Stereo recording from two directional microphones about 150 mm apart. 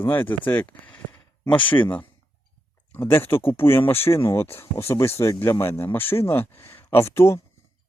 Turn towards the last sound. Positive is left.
turn(degrees=15)  # may be behind; listen again after turning